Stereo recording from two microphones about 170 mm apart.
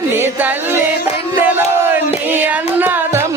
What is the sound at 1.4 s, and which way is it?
Crowd, 10° right (ahead or behind).